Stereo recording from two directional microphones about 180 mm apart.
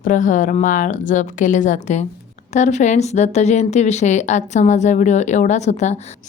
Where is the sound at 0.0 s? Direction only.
45° left (ahead or behind).